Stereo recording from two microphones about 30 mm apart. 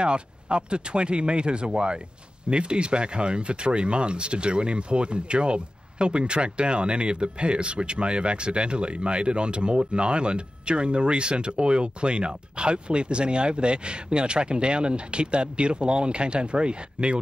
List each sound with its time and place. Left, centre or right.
0.0 s speech: right